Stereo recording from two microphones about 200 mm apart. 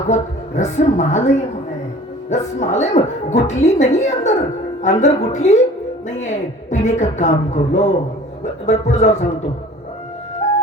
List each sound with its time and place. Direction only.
0.1 s a woman's voice: 35° left (ahead or behind)